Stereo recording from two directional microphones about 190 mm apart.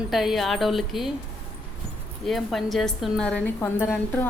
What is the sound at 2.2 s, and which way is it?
A woman's voice, centre (ahead or behind).